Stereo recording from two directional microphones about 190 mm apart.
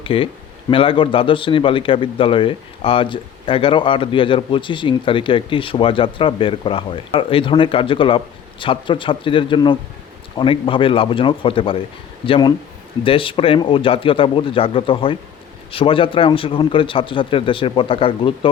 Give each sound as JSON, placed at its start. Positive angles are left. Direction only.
{"t": 0.0, "sound": "a man's voice", "side_deg": 30}